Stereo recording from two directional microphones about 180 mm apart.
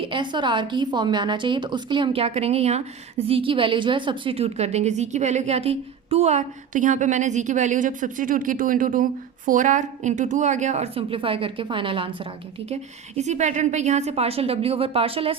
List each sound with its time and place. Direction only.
0.0 s a woman's voice: 25° right (ahead or behind)